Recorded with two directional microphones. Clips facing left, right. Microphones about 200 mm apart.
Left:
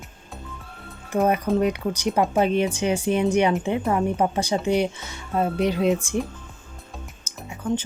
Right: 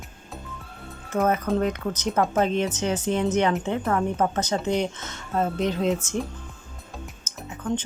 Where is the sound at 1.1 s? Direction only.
15° left (ahead or behind).